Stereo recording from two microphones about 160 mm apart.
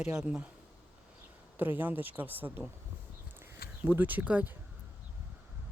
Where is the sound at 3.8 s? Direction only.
10° right (ahead or behind).